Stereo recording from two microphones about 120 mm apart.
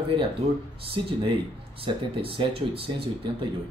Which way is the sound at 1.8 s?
50° right (ahead or behind).